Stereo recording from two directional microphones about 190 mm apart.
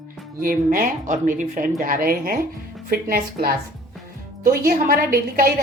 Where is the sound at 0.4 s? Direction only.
50° right (ahead or behind).